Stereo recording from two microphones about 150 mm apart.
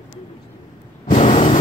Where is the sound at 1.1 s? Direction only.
45° left (ahead or behind).